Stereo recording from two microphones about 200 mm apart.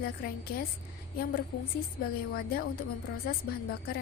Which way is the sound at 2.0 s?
50° left (ahead or behind).